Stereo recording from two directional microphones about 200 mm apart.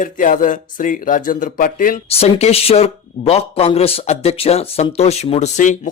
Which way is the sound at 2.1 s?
30° left (ahead or behind).